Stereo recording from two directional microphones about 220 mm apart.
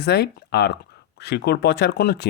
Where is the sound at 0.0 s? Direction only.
50° left (ahead or behind).